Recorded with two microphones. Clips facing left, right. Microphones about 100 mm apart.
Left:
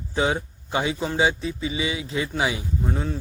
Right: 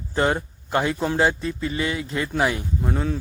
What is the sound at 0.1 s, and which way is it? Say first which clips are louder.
Speech: right 2 dB; centre (ahead or behind).